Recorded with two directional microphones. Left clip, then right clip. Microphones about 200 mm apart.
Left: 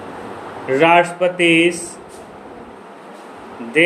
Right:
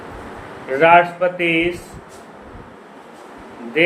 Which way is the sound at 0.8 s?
35° left (ahead or behind).